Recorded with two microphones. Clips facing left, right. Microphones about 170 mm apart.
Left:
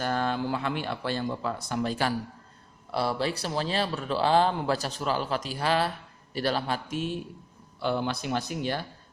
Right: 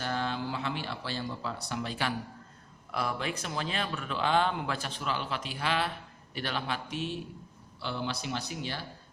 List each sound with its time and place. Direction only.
0.0 s speech: 50° left (ahead or behind)
2.9 s speech: 30° left (ahead or behind); by 8.8 s 50° left (ahead or behind)